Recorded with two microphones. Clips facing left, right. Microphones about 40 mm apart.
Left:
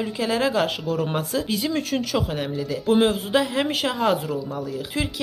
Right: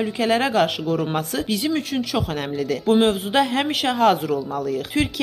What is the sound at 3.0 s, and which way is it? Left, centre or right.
Speech, right.